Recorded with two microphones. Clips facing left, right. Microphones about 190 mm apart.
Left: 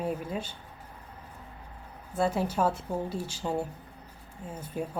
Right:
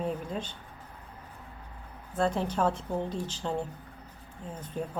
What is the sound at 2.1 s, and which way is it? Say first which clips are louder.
Speech: left 1 dB; 10° left (ahead or behind).